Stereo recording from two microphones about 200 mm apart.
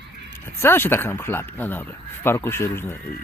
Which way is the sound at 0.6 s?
10° left (ahead or behind).